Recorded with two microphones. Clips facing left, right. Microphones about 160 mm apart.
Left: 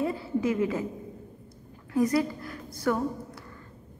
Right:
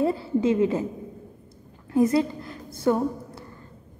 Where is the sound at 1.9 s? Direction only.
25° right (ahead or behind).